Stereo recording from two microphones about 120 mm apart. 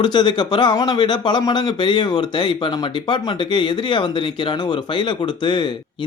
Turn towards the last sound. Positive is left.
turn(degrees=40)  # may be behind; listen again after turning